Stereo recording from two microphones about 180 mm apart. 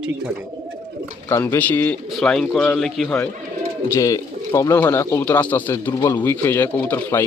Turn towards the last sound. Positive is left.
turn(degrees=10)  # may be behind; listen again after turning